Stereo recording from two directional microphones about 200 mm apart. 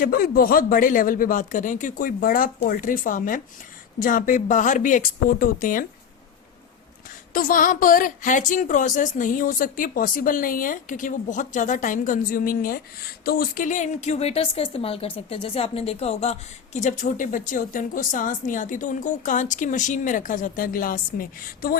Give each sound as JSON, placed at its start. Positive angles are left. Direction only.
{"t": 0.0, "sound": "a woman's voice", "side_deg": 45}
{"t": 7.3, "sound": "a woman's voice", "side_deg": 45}